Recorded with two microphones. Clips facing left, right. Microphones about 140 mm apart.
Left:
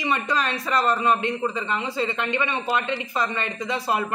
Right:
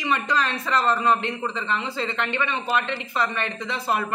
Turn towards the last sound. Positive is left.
turn(degrees=15)  # may be behind; listen again after turning